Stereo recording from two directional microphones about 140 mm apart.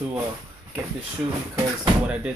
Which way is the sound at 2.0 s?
10° right (ahead or behind).